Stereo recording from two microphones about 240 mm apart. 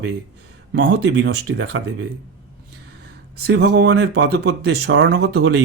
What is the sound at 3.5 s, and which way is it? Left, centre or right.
Speech, right.